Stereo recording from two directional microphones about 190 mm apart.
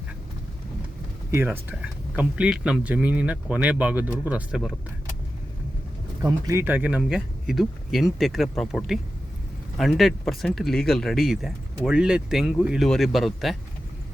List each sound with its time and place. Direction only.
1.3 s speech: 10° right (ahead or behind)
6.2 s speech: 15° right (ahead or behind); by 13.6 s centre (ahead or behind)